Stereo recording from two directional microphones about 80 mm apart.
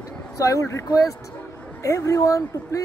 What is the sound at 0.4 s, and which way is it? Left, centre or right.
Speech, left.